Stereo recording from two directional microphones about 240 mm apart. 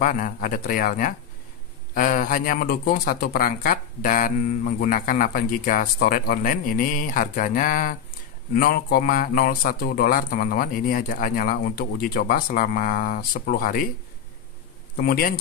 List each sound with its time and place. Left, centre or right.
0.0 s speech: left
15.0 s speech: left